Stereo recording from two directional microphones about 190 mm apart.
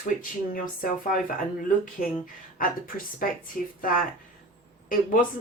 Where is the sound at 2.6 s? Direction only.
45° left (ahead or behind).